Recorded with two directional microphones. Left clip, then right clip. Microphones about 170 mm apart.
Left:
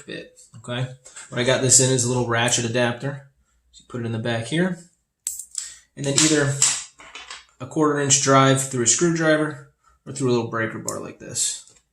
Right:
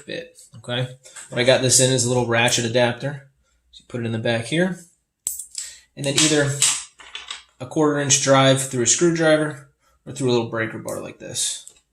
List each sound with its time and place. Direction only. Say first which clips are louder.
0.6 s speech: right 4 dB; 25° right (ahead or behind)
5.5 s a sound: even; 25° right (ahead or behind)
7.6 s speech: right 1 dB; 20° right (ahead or behind)